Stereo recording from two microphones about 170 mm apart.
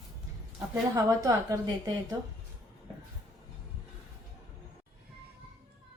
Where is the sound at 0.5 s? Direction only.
15° right (ahead or behind).